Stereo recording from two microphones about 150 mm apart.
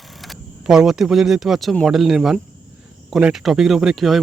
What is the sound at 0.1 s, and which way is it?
Speech, centre (ahead or behind).